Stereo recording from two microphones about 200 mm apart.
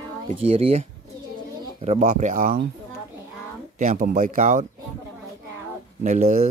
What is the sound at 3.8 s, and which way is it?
Speech, 40° right (ahead or behind).